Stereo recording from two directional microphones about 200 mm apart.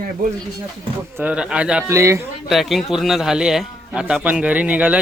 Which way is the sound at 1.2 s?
5° right (ahead or behind).